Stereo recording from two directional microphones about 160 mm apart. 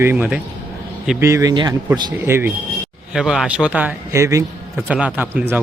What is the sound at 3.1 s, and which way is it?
A man's voice, 5° right (ahead or behind).